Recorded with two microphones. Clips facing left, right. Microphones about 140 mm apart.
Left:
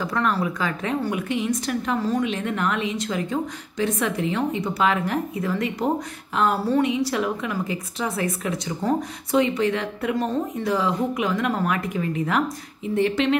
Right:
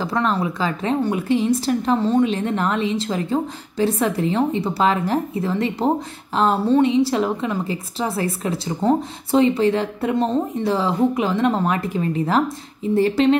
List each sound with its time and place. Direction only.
0.0 s a woman's voice: 25° right (ahead or behind)
6.3 s a sound: 30° right (ahead or behind)
7.1 s a woman's voice: 30° right (ahead or behind)